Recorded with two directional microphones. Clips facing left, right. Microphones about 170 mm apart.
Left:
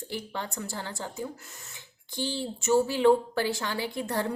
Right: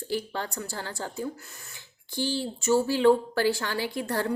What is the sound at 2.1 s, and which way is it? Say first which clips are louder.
A woman's voice: right 3 dB; 20° left (ahead or behind).